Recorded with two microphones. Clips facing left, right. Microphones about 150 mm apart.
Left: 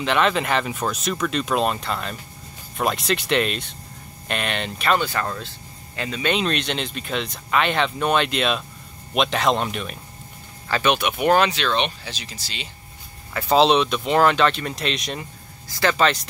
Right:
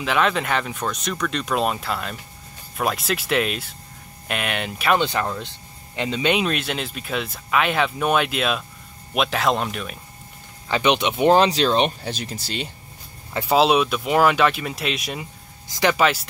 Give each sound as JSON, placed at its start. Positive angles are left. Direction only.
{"t": 0.0, "sound": "speech", "side_deg": 0}
{"t": 6.3, "sound": "speech", "side_deg": -5}
{"t": 10.7, "sound": "speech", "side_deg": -20}
{"t": 13.5, "sound": "speech", "side_deg": -5}